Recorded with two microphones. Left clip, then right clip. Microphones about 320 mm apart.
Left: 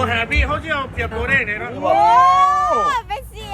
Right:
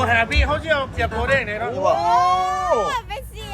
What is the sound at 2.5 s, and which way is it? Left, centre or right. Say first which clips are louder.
Baby cry: left 4 dB; centre.